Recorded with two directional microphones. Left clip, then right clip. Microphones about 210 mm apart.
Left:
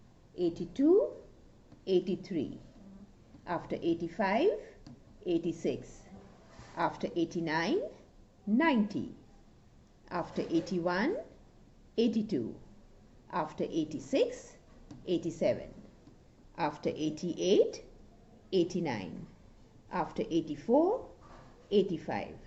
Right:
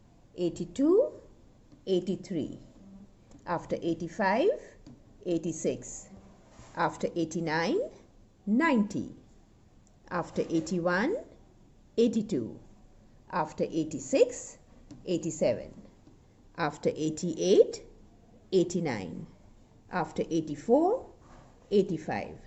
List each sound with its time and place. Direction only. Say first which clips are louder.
0.3 s a woman's voice: right 1 dB; 55° right (ahead or behind)
6.7 s a woman's voice: right 3 dB; 60° right (ahead or behind)
10.1 s a woman's voice: right 3 dB; 60° right (ahead or behind)
16.6 s a woman's voice: right 3 dB; 60° right (ahead or behind)